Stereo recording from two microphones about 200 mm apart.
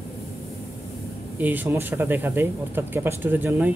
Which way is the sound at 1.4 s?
10° right (ahead or behind).